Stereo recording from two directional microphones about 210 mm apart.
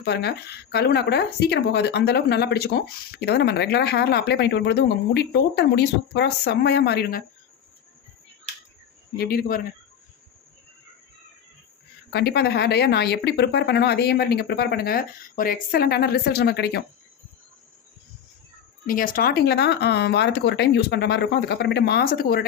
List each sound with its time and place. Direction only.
0.0 s speech: 50° left (ahead or behind)
9.1 s speech: 45° left (ahead or behind)
12.1 s speech: 50° left (ahead or behind)
18.9 s speech: 40° left (ahead or behind)